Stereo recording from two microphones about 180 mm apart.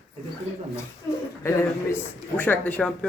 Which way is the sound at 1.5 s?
15° left (ahead or behind).